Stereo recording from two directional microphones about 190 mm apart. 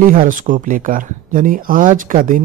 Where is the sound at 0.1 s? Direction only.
45° right (ahead or behind).